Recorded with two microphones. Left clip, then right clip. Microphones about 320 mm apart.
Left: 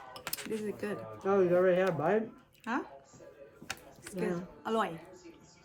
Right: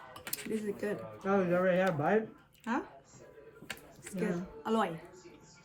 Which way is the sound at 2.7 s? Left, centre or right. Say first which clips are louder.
Even; centre.